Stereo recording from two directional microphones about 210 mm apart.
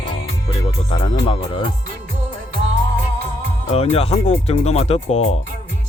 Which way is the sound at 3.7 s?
30° left (ahead or behind).